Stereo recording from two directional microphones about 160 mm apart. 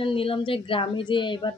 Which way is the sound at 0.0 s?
35° left (ahead or behind).